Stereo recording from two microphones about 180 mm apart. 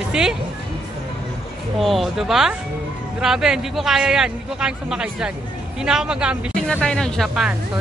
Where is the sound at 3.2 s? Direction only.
5° right (ahead or behind).